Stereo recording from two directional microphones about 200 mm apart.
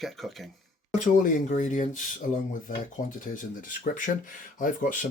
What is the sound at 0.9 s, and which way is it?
Speech, 40° left (ahead or behind).